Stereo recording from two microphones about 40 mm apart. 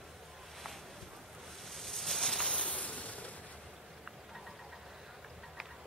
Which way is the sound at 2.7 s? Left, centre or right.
Left.